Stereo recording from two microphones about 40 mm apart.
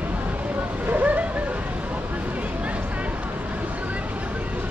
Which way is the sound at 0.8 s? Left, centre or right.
Right.